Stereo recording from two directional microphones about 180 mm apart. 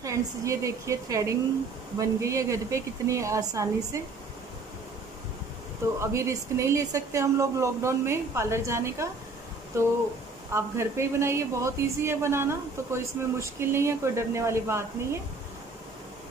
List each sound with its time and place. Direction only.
0.0 s a woman's voice: 15° right (ahead or behind)
5.9 s a woman's voice: 15° right (ahead or behind)